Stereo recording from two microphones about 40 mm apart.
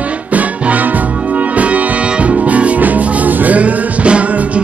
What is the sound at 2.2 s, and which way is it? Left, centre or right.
Music, right.